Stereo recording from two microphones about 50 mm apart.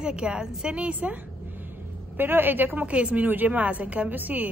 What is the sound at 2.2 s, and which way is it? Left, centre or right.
Speech, right.